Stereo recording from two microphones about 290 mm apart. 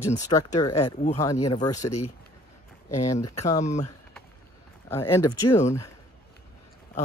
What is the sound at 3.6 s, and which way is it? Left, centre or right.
Speech, left.